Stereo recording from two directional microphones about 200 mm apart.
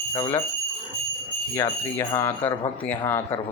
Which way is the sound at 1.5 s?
15° left (ahead or behind).